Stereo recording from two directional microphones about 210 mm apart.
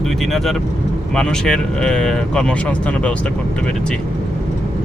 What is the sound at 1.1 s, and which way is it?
Speech, 5° left (ahead or behind).